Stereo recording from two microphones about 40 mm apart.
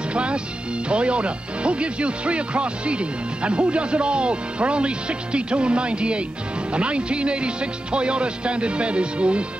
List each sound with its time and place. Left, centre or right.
0.1 s speech: right